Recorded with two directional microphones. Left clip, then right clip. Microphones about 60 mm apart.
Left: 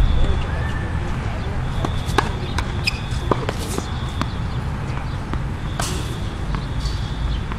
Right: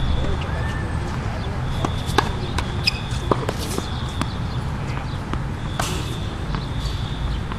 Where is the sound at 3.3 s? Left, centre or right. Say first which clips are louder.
Even; left.